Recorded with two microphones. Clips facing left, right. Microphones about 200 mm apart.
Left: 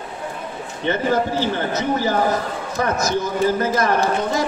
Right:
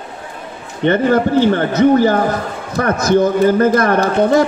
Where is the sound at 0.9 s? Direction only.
60° right (ahead or behind).